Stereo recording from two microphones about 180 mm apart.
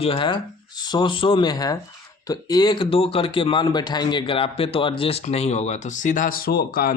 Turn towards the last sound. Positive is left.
turn(degrees=55)  # may be behind; listen again after turning